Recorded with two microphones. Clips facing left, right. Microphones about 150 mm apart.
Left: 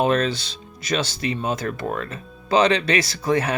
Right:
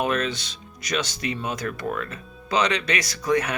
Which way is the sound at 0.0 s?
30° left (ahead or behind).